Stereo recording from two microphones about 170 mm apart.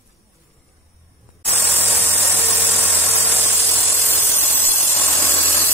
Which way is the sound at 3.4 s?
15° left (ahead or behind).